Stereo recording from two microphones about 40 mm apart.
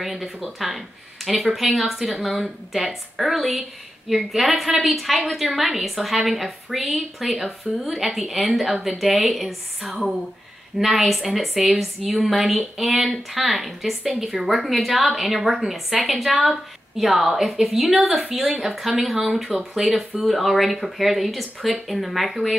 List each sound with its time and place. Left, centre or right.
0.0 s a woman's voice: centre